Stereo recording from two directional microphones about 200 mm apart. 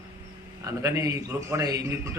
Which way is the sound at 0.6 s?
15° right (ahead or behind).